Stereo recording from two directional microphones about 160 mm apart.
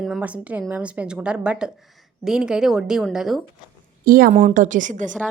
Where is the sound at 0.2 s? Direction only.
10° right (ahead or behind).